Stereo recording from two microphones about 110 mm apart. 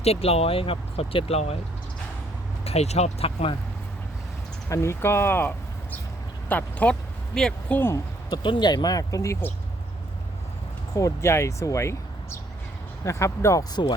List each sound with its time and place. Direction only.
0.0 s speech: 65° left (ahead or behind)
2.6 s speech: 75° left (ahead or behind); by 3.6 s 60° left (ahead or behind)
4.7 s speech: 25° left (ahead or behind); by 7.8 s 5° left (ahead or behind)
7.9 s speech: 40° left (ahead or behind)
10.9 s speech: 25° left (ahead or behind)